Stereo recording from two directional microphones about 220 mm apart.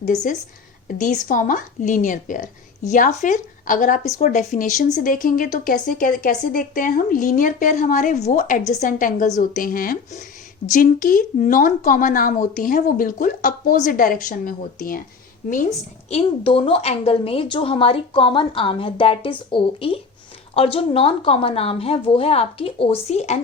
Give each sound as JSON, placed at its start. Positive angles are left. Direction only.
{"t": 0.0, "sound": "speech", "side_deg": 35}
{"t": 16.0, "sound": "a woman's voice", "side_deg": 25}